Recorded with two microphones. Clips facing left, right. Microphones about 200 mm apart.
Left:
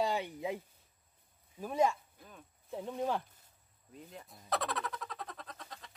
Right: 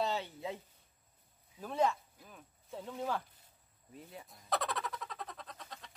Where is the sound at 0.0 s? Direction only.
15° left (ahead or behind).